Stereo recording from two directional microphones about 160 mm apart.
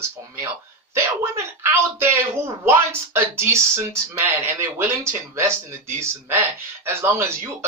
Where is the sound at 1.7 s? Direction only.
15° right (ahead or behind).